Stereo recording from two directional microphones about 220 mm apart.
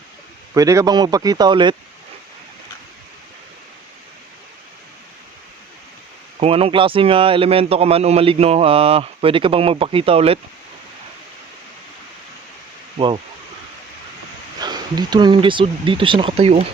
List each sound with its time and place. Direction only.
0.5 s speech: 15° right (ahead or behind)
6.4 s speech: 25° right (ahead or behind)
13.0 s speech: 20° right (ahead or behind)
14.6 s speech: 20° right (ahead or behind)